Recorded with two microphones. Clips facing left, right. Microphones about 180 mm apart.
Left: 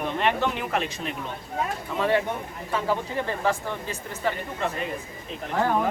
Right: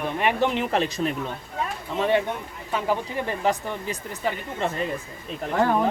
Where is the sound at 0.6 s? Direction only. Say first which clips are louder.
Right 4 dB; 30° right (ahead or behind).